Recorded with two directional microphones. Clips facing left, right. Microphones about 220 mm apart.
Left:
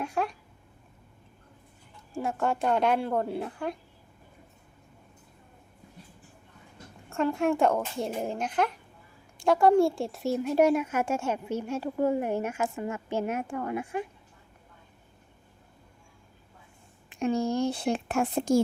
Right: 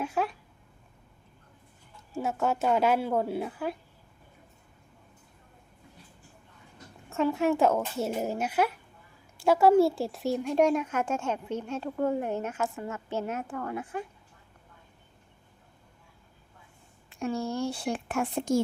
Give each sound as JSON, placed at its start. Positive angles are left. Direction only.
{"t": 0.0, "sound": "a sound", "side_deg": 0}
{"t": 2.1, "sound": "a woman's voice", "side_deg": -5}
{"t": 7.1, "sound": "a woman's voice", "side_deg": 0}
{"t": 17.1, "sound": "speech", "side_deg": 15}